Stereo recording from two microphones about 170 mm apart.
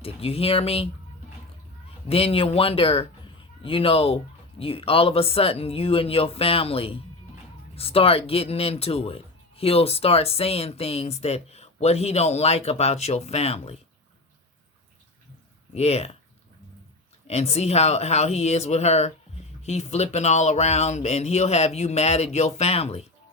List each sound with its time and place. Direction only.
0.0 s speech: 35° left (ahead or behind)
2.0 s speech: 35° left (ahead or behind)
15.7 s speech: 40° left (ahead or behind)
17.2 s speech: 40° left (ahead or behind)